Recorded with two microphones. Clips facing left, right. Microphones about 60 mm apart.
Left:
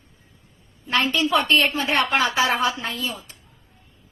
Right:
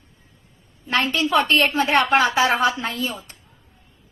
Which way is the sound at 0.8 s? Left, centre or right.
Right.